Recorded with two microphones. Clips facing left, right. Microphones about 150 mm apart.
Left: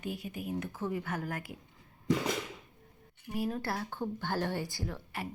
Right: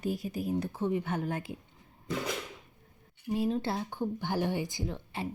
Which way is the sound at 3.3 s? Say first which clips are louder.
Right 4 dB; 25° right (ahead or behind).